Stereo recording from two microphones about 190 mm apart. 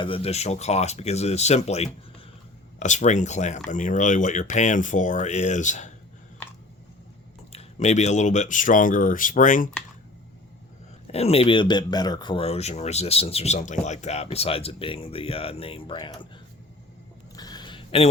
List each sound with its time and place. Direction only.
0.0 s speech: 30° left (ahead or behind)
7.5 s speech: 35° left (ahead or behind)
11.1 s speech: 30° left (ahead or behind)
17.3 s a sound: 20° left (ahead or behind)